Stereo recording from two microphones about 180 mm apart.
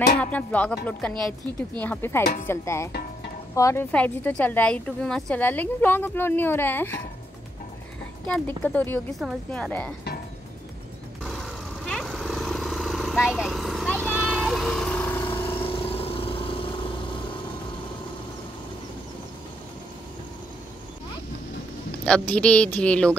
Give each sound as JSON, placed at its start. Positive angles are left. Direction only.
{"t": 0.2, "sound": "a woman's voice", "side_deg": 10}
{"t": 1.8, "sound": "a woman's voice", "side_deg": 10}
{"t": 8.3, "sound": "a woman's voice", "side_deg": 10}
{"t": 11.2, "sound": "vehicle", "side_deg": 0}
{"t": 15.5, "sound": "vehicle", "side_deg": 30}
{"t": 22.0, "sound": "a woman's voice", "side_deg": 5}